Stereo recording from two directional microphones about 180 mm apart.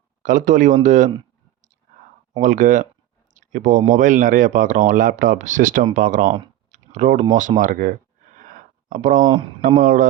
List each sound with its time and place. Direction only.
0.2 s speech: 45° right (ahead or behind)
2.4 s speech: 45° right (ahead or behind)
3.3 s a sound: 45° right (ahead or behind)
3.8 s speech: 45° right (ahead or behind)
6.7 s typing: 40° right (ahead or behind)
7.6 s speech: 50° right (ahead or behind)
8.4 s a sound: 50° right (ahead or behind)
9.6 s speech: 50° right (ahead or behind)